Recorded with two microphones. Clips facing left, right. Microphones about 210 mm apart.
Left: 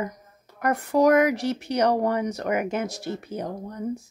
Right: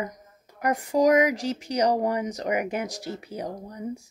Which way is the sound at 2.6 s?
15° right (ahead or behind).